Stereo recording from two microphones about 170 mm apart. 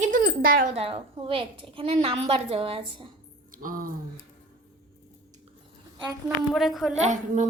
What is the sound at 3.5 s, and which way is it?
Speech, 55° right (ahead or behind).